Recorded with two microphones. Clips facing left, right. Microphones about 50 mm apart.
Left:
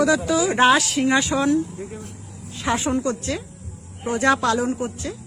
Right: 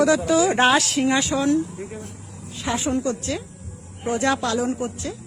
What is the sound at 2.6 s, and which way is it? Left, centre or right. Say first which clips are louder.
Speech: left 1 dB; left.